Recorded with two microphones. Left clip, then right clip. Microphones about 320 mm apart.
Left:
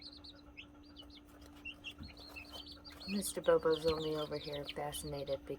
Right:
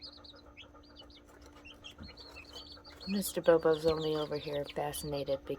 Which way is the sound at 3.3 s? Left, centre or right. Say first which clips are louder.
Right 4 dB; right.